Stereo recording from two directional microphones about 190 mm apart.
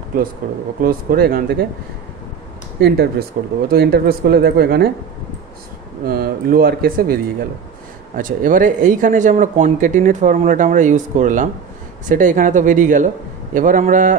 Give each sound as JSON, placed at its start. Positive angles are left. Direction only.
{"t": 0.8, "sound": "speech", "side_deg": -50}
{"t": 2.8, "sound": "speech", "side_deg": -55}
{"t": 6.0, "sound": "speech", "side_deg": -50}
{"t": 8.2, "sound": "speech", "side_deg": -45}